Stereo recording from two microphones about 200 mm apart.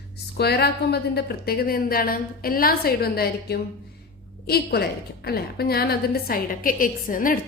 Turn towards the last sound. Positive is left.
turn(degrees=45)  # may be behind; listen again after turning